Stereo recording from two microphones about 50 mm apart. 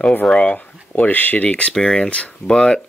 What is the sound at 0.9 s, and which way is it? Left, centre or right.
Speech, left.